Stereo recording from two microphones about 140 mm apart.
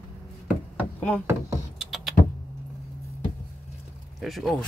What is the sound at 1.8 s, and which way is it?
Typing, centre (ahead or behind).